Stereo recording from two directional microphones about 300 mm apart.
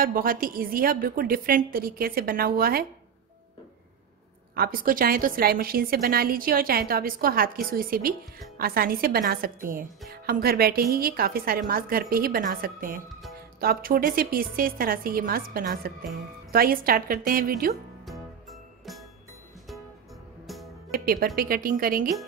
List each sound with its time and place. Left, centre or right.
0.0 s a woman's voice: right
4.6 s a woman's voice: right
20.9 s a woman's voice: right